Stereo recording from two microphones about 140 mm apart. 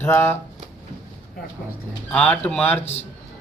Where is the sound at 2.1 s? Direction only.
10° left (ahead or behind).